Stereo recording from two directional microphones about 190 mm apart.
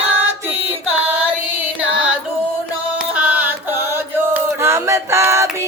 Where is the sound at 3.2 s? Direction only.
10° right (ahead or behind).